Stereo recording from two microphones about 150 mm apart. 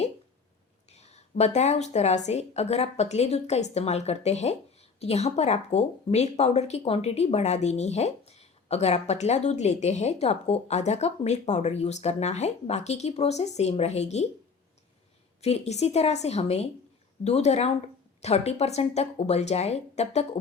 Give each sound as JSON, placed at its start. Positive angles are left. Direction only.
{"t": 0.9, "sound": "speech", "side_deg": 45}
{"t": 15.4, "sound": "speech", "side_deg": 45}